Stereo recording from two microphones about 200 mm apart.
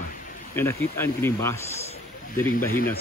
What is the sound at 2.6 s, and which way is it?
Speech, 45° left (ahead or behind).